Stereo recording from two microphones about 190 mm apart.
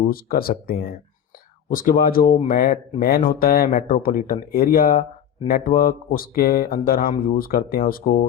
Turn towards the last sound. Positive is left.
turn(degrees=50)  # may be behind; listen again after turning